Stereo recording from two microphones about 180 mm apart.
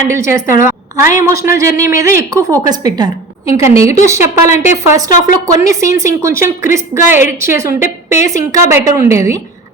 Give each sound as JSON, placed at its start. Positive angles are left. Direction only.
{"t": 0.1, "sound": "a woman's voice", "side_deg": -15}